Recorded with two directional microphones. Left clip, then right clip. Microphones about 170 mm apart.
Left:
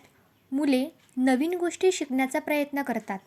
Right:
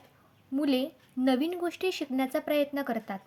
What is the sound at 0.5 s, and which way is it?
Speech, 20° left (ahead or behind).